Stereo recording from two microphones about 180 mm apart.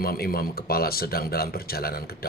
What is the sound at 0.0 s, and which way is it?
Speech, 55° left (ahead or behind).